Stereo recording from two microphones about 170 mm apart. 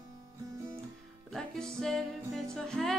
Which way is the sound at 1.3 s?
5° left (ahead or behind).